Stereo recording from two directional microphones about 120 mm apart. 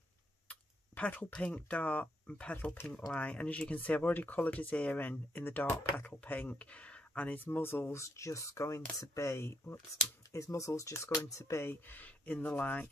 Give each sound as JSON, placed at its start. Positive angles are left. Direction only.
{"t": 0.5, "sound": "speech", "side_deg": 10}